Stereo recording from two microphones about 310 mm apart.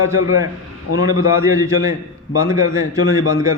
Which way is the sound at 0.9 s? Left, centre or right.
Left.